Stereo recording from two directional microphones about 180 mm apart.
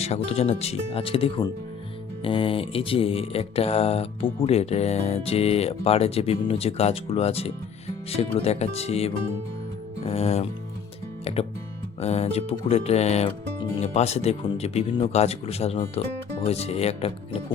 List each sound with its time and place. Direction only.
0.0 s speech: 35° left (ahead or behind)